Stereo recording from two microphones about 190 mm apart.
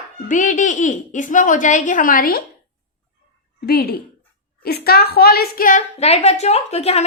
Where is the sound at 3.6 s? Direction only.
55° left (ahead or behind); by 7.0 s 35° left (ahead or behind).